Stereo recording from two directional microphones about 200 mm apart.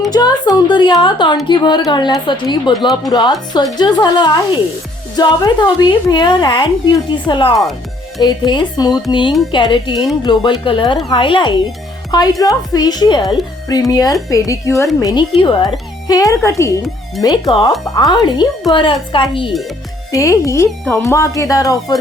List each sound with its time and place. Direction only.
0.1 s a woman's voice: 20° left (ahead or behind)
20.7 s speech: 5° left (ahead or behind)
21.0 s speech: 15° left (ahead or behind)